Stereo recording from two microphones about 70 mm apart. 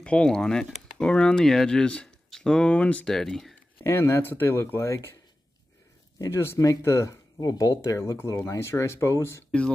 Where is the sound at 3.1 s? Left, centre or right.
Centre.